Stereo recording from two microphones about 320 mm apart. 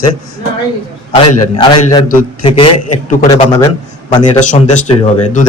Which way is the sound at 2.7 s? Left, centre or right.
Left.